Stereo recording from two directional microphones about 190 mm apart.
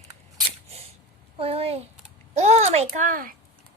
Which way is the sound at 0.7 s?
30° right (ahead or behind).